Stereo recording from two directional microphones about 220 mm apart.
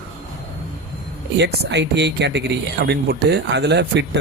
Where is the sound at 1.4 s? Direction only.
50° right (ahead or behind).